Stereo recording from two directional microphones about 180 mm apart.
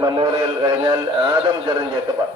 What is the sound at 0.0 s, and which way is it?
A man's voice, 30° right (ahead or behind).